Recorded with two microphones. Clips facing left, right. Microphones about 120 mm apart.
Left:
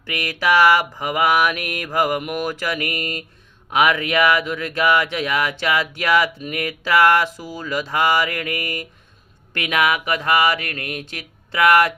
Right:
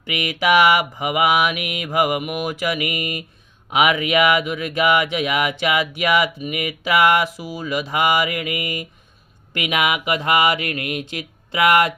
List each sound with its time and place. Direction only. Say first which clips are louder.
0.0 s speech: right 1 dB; 15° right (ahead or behind)